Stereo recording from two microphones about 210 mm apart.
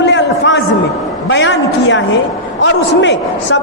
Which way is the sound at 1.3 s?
60° left (ahead or behind).